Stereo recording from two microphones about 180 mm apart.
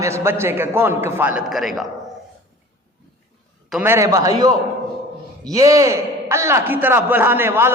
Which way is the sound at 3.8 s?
15° right (ahead or behind).